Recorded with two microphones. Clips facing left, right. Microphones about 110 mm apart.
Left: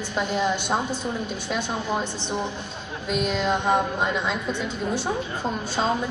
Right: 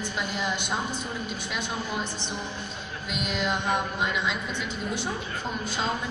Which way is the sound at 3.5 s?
30° left (ahead or behind).